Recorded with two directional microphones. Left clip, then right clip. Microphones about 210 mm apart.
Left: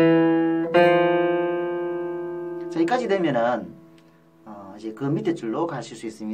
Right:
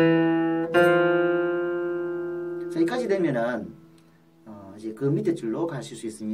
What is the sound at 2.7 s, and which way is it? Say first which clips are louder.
Speech: left 3 dB; centre (ahead or behind).